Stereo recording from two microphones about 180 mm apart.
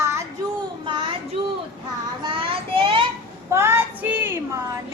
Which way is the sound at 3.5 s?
15° right (ahead or behind).